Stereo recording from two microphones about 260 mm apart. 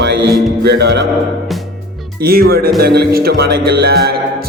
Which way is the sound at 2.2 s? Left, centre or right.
Right.